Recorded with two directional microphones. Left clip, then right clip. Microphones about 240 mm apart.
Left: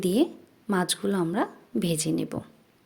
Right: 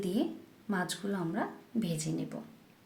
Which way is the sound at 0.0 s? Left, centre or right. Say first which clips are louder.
Left 9 dB; left.